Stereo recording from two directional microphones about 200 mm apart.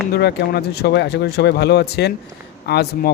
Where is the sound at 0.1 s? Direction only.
55° left (ahead or behind).